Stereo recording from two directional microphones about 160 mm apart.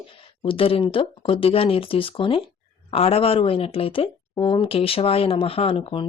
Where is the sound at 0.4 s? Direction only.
35° left (ahead or behind).